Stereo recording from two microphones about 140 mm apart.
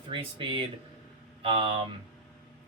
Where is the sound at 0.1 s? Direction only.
35° right (ahead or behind).